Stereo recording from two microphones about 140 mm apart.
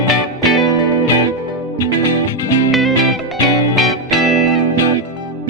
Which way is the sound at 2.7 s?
Centre (ahead or behind).